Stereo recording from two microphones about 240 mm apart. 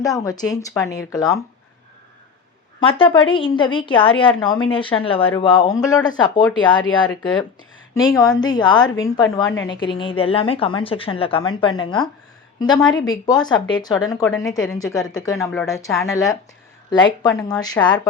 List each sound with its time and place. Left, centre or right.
0.0 s speech: centre
2.8 s a woman's voice: left
8.1 s a woman's voice: centre